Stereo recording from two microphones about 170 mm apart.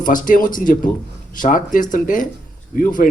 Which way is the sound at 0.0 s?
50° left (ahead or behind).